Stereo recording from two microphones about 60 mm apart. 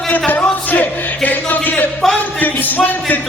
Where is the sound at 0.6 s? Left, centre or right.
Left.